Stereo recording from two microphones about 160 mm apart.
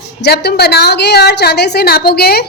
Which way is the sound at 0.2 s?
90° left.